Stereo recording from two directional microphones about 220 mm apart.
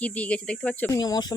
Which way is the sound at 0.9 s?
15° left (ahead or behind).